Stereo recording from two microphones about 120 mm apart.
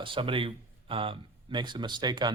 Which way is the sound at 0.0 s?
45° right (ahead or behind).